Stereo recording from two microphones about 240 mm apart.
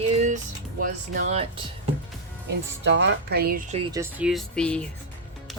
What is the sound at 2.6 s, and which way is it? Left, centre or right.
Speech, right.